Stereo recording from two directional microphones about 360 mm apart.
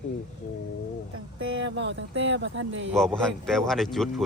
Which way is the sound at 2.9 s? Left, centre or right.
Centre.